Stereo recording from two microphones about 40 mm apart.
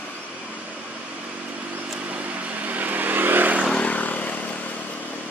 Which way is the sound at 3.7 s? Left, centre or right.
Left.